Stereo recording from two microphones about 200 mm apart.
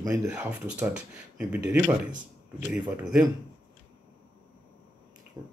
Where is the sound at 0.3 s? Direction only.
5° right (ahead or behind).